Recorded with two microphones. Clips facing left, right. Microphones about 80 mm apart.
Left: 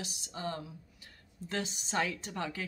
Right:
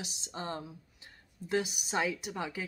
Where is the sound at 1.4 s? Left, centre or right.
Centre.